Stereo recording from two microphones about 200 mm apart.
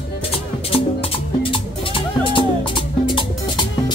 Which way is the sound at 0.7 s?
25° left (ahead or behind).